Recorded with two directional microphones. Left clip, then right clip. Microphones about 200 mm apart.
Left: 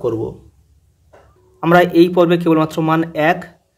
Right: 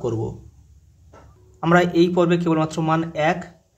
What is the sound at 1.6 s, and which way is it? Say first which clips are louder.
Speech: left 6 dB; 20° left (ahead or behind).